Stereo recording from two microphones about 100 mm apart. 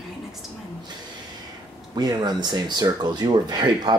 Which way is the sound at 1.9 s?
45° right (ahead or behind).